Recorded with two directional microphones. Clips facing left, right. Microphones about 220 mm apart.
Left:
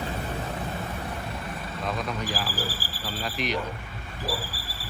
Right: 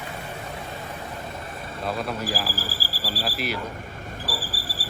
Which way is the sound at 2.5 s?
40° right (ahead or behind).